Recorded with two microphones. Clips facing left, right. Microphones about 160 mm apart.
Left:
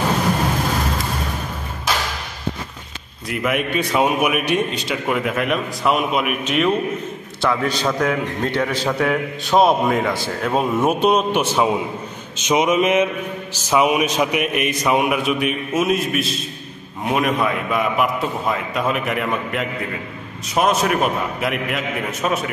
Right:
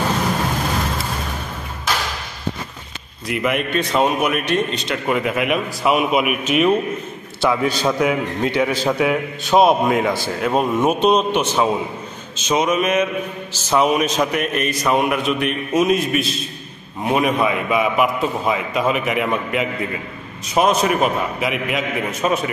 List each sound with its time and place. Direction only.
3.3 s a man's voice: centre (ahead or behind)
12.4 s mantra: 15° left (ahead or behind)
13.7 s a man's voice: 10° left (ahead or behind)